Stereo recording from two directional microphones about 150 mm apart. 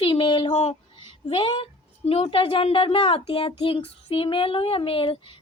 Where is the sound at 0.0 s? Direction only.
35° left (ahead or behind).